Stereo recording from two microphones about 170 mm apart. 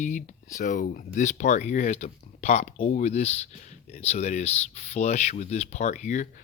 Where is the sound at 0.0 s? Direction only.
45° left (ahead or behind).